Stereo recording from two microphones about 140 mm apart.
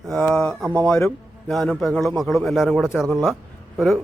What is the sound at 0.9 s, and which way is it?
Speech, 5° left (ahead or behind).